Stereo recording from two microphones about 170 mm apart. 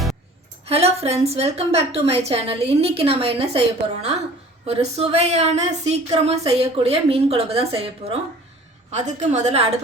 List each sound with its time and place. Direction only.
0.7 s a woman's voice: 35° right (ahead or behind)
4.6 s a woman's voice: 35° right (ahead or behind)